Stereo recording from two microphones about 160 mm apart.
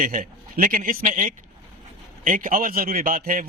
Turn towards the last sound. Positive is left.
turn(degrees=-60)  # may be behind; listen again after turning